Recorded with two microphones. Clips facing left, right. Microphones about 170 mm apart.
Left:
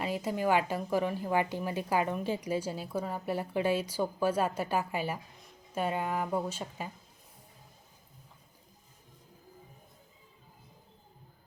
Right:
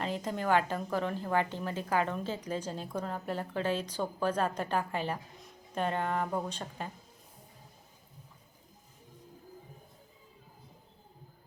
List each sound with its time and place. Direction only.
0.0 s a woman's voice: 10° left (ahead or behind)